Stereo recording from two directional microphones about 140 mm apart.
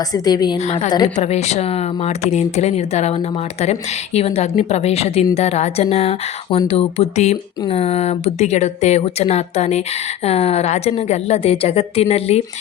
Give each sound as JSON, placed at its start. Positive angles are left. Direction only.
{"t": 0.1, "sound": "a woman's voice", "side_deg": 30}
{"t": 0.6, "sound": "a woman's voice", "side_deg": 55}
{"t": 0.9, "sound": "a woman's voice", "side_deg": 30}
{"t": 1.1, "sound": "speech", "side_deg": 50}